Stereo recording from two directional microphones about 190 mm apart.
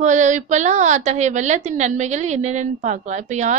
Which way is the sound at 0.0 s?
40° right (ahead or behind).